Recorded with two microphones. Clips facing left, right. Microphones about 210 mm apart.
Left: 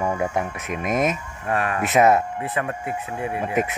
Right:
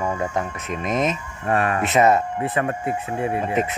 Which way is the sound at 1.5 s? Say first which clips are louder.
Right 3 dB; centre (ahead or behind).